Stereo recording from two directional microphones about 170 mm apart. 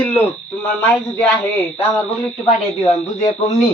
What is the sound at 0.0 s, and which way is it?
Speech, 10° left (ahead or behind).